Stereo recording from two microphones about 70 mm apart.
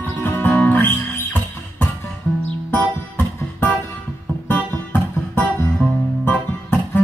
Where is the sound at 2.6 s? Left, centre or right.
Left.